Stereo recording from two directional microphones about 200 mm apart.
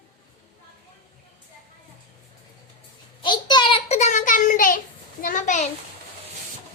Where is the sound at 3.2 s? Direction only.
20° left (ahead or behind); by 4.8 s 40° left (ahead or behind).